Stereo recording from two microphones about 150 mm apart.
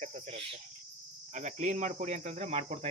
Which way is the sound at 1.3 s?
50° right (ahead or behind).